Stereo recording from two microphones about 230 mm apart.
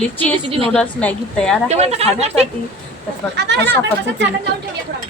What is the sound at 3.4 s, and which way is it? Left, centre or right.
Speech, right.